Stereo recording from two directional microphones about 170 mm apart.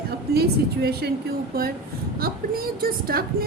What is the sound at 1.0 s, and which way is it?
Speech, 75° right (ahead or behind).